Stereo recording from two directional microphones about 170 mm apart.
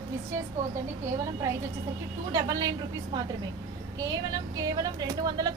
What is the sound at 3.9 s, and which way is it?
A woman's voice, 20° right (ahead or behind).